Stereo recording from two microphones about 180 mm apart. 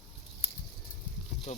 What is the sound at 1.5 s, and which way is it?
Speech, 40° left (ahead or behind).